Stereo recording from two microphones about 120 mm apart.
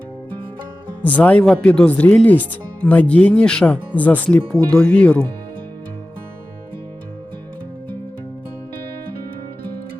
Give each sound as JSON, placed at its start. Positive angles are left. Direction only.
{"t": 1.0, "sound": "speech", "side_deg": 15}